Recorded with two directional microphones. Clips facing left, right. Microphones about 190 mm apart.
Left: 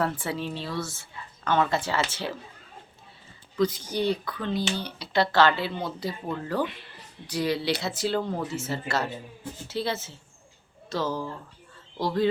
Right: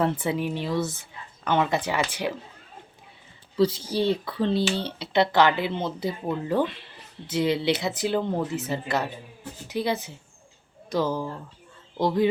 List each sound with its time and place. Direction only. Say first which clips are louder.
0.0 s speech: right 4 dB; 20° right (ahead or behind)
3.6 s speech: right 3 dB; 30° right (ahead or behind)